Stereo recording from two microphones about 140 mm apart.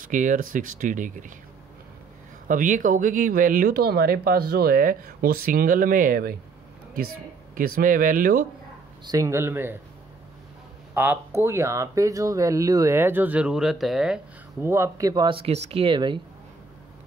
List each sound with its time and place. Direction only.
0.1 s speech: 65° right (ahead or behind)
2.4 s speech: 70° right (ahead or behind); by 6.3 s 90° right
7.5 s speech: 85° right
9.1 s speech: 20° right (ahead or behind)
11.0 s speech: 15° right (ahead or behind)
14.6 s speech: 20° right (ahead or behind)
15.2 s speech: 45° right (ahead or behind)